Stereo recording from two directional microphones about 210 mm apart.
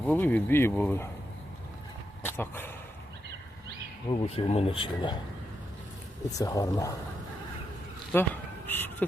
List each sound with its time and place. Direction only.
0.0 s speech: 10° left (ahead or behind)
2.2 s speech: 10° left (ahead or behind)
4.1 s speech: 25° left (ahead or behind)
6.4 s speech: 15° left (ahead or behind)
8.1 s speech: 10° left (ahead or behind)
8.6 s a sound: 10° left (ahead or behind)